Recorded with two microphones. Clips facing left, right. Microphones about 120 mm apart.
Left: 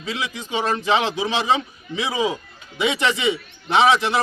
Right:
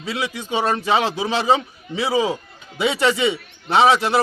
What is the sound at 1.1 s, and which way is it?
A man's voice, 40° right (ahead or behind).